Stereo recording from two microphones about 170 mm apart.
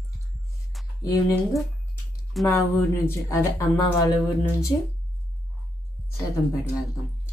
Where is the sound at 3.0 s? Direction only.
20° left (ahead or behind).